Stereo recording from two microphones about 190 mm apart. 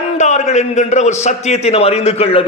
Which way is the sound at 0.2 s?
40° left (ahead or behind).